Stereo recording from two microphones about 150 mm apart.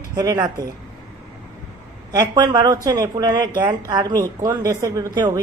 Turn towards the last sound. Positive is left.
turn(degrees=-25)  # may be behind; listen again after turning